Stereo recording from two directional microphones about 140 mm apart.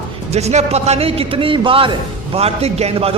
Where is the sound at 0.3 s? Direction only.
50° right (ahead or behind).